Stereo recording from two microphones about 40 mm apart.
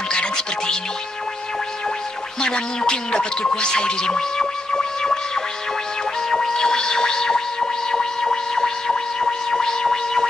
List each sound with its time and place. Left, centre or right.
0.1 s music: left
2.4 s speech: centre
6.2 s music: centre